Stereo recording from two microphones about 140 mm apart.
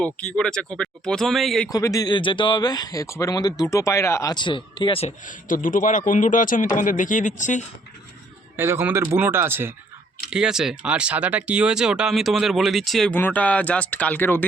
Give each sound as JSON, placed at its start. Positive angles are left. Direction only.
{"t": 0.0, "sound": "speech", "side_deg": 5}
{"t": 1.7, "sound": "speech", "side_deg": 25}
{"t": 5.0, "sound": "speech", "side_deg": 70}
{"t": 8.5, "sound": "speech", "side_deg": -15}
{"t": 10.2, "sound": "speech", "side_deg": -5}